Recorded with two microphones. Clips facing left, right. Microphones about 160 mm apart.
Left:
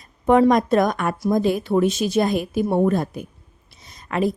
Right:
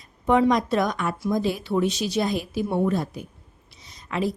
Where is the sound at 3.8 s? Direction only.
50° left (ahead or behind).